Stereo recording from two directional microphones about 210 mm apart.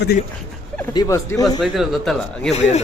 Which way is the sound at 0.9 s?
15° left (ahead or behind).